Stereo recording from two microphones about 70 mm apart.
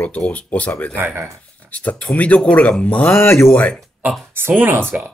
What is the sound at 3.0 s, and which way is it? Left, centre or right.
Speech, left.